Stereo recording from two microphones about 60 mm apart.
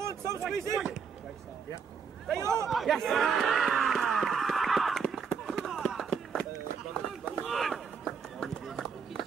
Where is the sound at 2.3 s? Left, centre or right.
Right.